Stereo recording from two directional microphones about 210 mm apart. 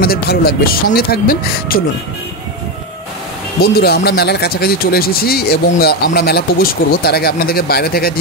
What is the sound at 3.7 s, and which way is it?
Speech, 50° left (ahead or behind).